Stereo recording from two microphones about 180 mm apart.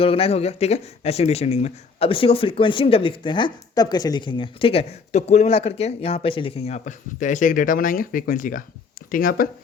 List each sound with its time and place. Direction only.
0.0 s speech: 30° left (ahead or behind); by 9.5 s 50° left (ahead or behind)